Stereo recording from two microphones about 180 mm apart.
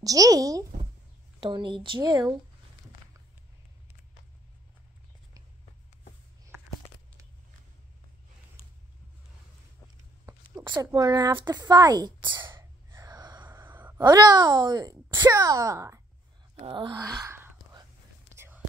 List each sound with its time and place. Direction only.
0.0 s a woman's voice: 20° right (ahead or behind)
10.7 s a woman's voice: 20° right (ahead or behind)
11.5 s a sound: 20° right (ahead or behind)
13.5 s a sound: 10° right (ahead or behind)
15.2 s speech: 20° right (ahead or behind)
16.5 s whispering: 30° right (ahead or behind); by 18.6 s 15° right (ahead or behind)